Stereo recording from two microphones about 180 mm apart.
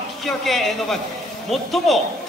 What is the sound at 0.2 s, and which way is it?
A man's voice, centre (ahead or behind).